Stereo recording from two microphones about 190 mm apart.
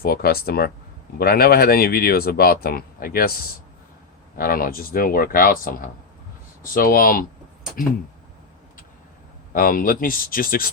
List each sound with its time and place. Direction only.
0.0 s speech: 55° left (ahead or behind)
4.4 s speech: 50° left (ahead or behind)
9.6 s speech: 45° left (ahead or behind)